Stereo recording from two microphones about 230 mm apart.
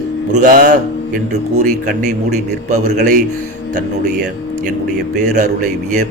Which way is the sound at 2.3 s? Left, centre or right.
Right.